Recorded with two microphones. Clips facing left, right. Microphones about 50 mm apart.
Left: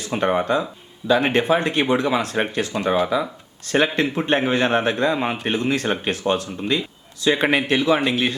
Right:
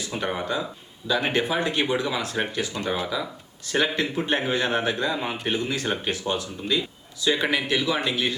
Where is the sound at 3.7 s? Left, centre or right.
Left.